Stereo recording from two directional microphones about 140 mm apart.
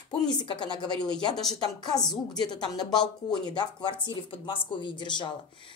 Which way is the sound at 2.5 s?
30° left (ahead or behind).